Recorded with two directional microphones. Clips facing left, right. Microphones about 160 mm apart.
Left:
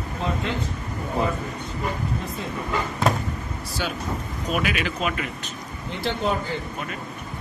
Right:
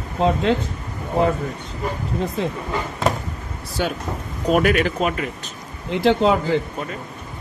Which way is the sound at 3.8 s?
50° right (ahead or behind).